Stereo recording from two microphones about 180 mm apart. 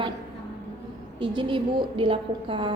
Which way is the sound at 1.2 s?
30° right (ahead or behind).